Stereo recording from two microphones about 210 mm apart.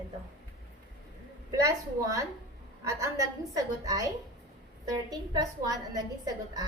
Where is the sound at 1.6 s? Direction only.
15° right (ahead or behind).